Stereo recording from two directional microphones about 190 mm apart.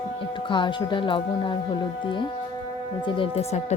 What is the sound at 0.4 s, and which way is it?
Speech, 25° left (ahead or behind).